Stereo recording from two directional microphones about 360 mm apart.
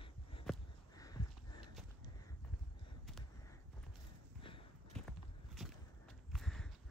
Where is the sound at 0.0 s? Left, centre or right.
Centre.